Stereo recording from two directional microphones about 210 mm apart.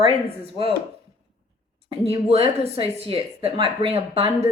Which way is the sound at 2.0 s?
30° right (ahead or behind).